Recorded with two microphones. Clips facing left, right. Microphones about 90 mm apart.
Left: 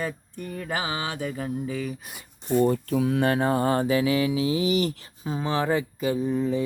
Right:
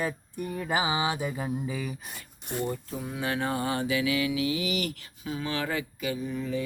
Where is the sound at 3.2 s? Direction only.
40° left (ahead or behind).